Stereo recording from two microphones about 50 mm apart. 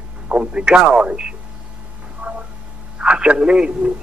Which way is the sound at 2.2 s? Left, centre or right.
Right.